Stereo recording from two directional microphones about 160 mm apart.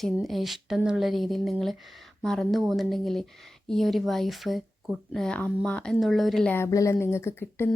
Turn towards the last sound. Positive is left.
turn(degrees=15)  # may be behind; listen again after turning